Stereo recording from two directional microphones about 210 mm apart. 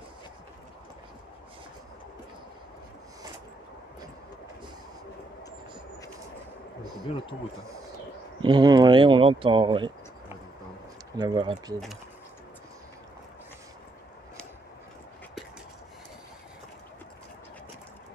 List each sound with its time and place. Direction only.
6.8 s a sound: 20° right (ahead or behind)
8.4 s speech: 20° right (ahead or behind)
11.1 s speech: 20° right (ahead or behind)